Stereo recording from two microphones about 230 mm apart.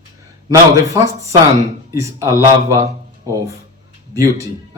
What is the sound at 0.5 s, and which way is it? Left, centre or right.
Speech, centre.